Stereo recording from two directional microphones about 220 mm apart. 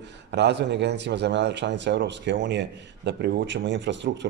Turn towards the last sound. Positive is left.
turn(degrees=-55)  # may be behind; listen again after turning